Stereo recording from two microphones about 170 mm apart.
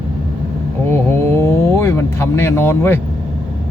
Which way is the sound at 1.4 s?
15° left (ahead or behind).